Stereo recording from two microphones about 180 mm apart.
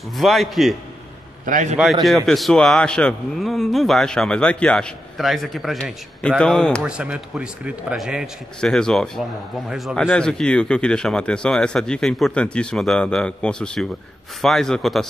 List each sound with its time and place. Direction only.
0.2 s a man's voice: centre (ahead or behind)
1.4 s a man's voice: 45° right (ahead or behind)
2.0 s a man's voice: centre (ahead or behind)